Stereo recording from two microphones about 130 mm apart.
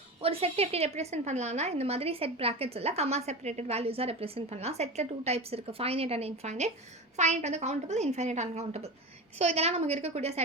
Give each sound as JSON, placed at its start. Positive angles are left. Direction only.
{"t": 0.2, "sound": "a woman's voice", "side_deg": -50}